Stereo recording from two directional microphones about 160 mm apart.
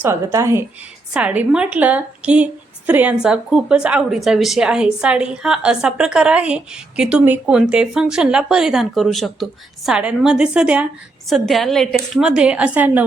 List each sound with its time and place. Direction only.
0.0 s a woman's voice: 20° right (ahead or behind)